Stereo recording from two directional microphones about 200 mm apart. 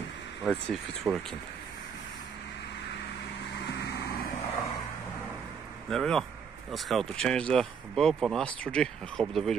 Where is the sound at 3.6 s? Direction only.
55° left (ahead or behind).